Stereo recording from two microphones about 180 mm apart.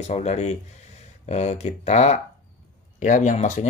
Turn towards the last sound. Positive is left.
turn(degrees=40)  # may be behind; listen again after turning